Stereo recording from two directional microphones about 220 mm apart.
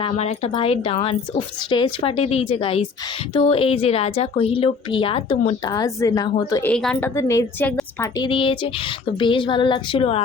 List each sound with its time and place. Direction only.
0.0 s a woman's voice: 25° left (ahead or behind)
6.6 s a woman's voice: 5° left (ahead or behind); by 10.2 s 25° left (ahead or behind)